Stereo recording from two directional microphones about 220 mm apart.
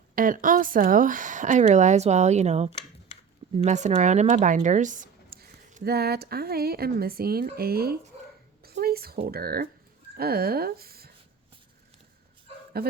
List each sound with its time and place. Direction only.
0.2 s speech: 40° right (ahead or behind)
8.6 s a sound: 45° right (ahead or behind)
9.2 s speech: 45° right (ahead or behind)